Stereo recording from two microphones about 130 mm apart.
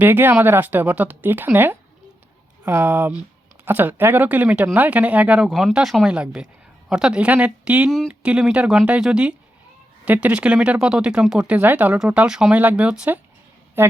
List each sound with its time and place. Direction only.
0.0 s speech: 15° right (ahead or behind)